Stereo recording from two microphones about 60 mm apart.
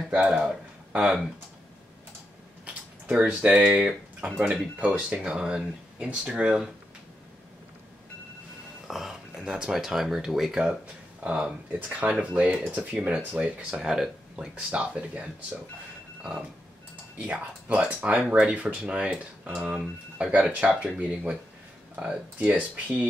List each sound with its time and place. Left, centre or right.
0.1 s speech: right
2.6 s a sound: right
3.4 s speech: centre
8.8 s speech: centre
11.2 s speech: right
14.5 s speech: right
16.2 s a sound: centre
17.2 s speech: right